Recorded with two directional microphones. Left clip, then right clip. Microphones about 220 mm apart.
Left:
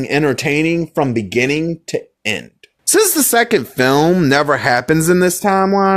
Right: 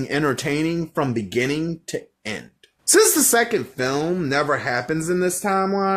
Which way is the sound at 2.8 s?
45° left (ahead or behind).